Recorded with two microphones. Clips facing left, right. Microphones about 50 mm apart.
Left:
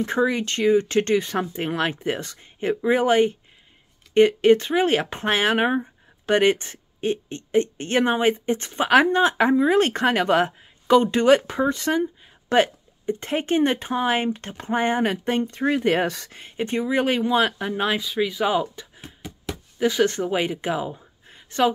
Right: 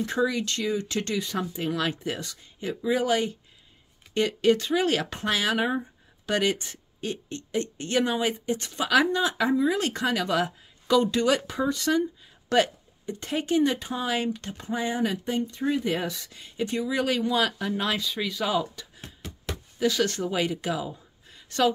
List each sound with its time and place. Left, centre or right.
0.0 s speech: left
18.0 s speech: centre
19.2 s a sound: centre
19.8 s speech: left